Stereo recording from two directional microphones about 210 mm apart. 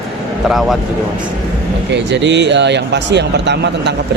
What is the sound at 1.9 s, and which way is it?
Speech, 55° right (ahead or behind).